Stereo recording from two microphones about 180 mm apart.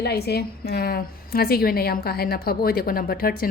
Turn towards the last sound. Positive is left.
turn(degrees=55)  # may be behind; listen again after turning